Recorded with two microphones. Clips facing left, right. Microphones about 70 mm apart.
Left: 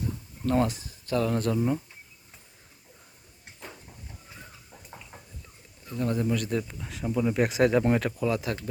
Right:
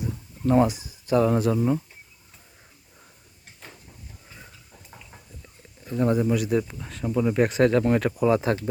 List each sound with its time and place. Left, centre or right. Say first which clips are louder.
0.0 s a sound: right 4 dB; centre
1.1 s speech: right 6 dB; centre
1.4 s speech: right 4 dB; centre
4.7 s a sound: left 1 dB; centre
5.8 s speech: right 6 dB; right
6.1 s speech: right 5 dB; centre
8.2 s speech: right 7 dB; right